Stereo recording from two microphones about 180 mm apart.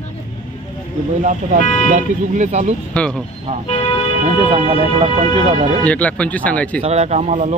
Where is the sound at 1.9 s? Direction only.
40° right (ahead or behind).